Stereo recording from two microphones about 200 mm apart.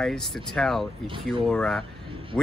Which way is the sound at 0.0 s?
Centre (ahead or behind).